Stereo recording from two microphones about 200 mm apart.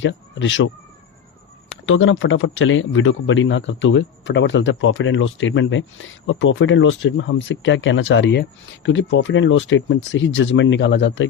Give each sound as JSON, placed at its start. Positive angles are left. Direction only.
{"t": 0.0, "sound": "a man's voice", "side_deg": 65}
{"t": 1.9, "sound": "a man's voice", "side_deg": 75}